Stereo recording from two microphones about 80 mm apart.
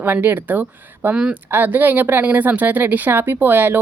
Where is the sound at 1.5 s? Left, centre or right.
Right.